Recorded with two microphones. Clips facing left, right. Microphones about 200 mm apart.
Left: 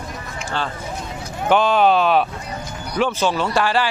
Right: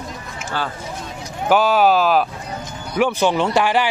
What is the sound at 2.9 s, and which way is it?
Speech, 15° right (ahead or behind).